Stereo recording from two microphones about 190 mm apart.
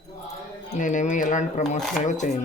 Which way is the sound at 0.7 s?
40° left (ahead or behind).